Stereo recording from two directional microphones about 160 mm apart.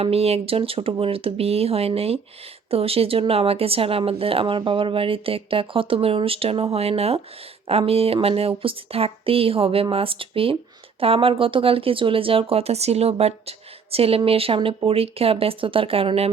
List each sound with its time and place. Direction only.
0.0 s speech: 40° right (ahead or behind)